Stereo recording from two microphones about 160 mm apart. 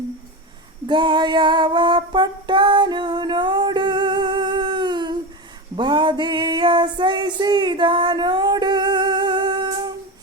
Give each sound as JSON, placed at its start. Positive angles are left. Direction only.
{"t": 0.9, "sound": "female singing", "side_deg": -30}
{"t": 5.7, "sound": "music", "side_deg": -30}